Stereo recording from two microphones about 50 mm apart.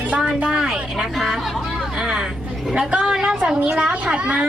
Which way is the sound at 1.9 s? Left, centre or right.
Centre.